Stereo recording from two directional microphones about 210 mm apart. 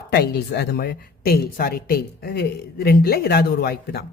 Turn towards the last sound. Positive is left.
turn(degrees=50)  # may be behind; listen again after turning